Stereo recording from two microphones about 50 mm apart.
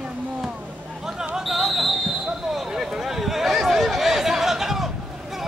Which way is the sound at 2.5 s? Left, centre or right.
Centre.